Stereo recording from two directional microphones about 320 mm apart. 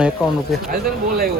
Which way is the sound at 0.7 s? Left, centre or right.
Right.